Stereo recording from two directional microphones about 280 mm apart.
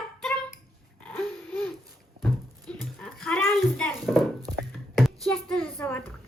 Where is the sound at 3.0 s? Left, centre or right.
Centre.